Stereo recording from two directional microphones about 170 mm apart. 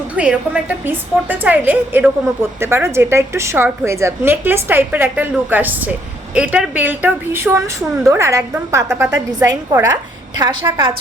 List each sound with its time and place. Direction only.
0.2 s a woman's voice: 5° right (ahead or behind)
10.3 s a woman's voice: 25° right (ahead or behind)